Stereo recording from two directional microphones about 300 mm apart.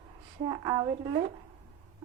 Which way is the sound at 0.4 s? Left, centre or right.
Centre.